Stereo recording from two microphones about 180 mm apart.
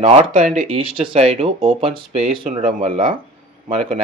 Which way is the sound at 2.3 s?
50° right (ahead or behind).